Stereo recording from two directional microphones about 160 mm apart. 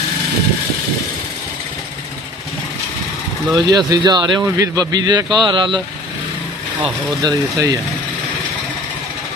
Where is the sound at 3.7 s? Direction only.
25° right (ahead or behind).